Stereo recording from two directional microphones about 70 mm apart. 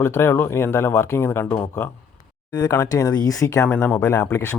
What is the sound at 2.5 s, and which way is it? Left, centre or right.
Speech, left.